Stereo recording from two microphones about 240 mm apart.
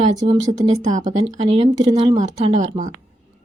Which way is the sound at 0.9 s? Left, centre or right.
Right.